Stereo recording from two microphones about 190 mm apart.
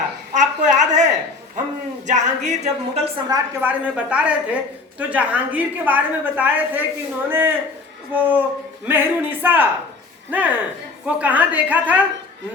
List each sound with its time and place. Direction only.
0.3 s a sound: 40° right (ahead or behind)
2.0 s speech: 40° right (ahead or behind)
3.2 s a woman's voice: 15° right (ahead or behind)